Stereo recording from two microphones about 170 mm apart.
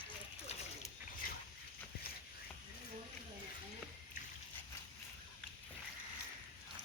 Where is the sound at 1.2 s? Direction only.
55° left (ahead or behind).